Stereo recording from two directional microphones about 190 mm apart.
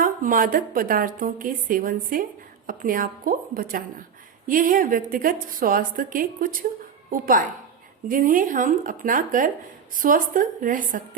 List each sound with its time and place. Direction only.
0.0 s a woman's voice: 45° right (ahead or behind)